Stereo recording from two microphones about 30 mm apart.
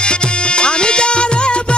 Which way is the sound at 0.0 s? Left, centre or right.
Left.